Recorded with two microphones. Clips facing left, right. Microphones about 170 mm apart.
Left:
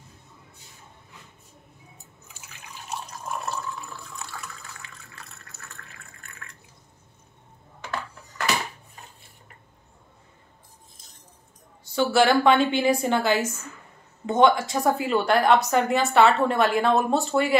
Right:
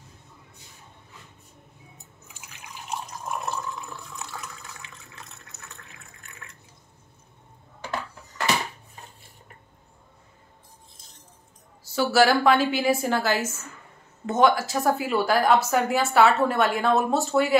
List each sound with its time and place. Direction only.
2.3 s water: 15° right (ahead or behind)
11.8 s a woman's voice: 5° right (ahead or behind)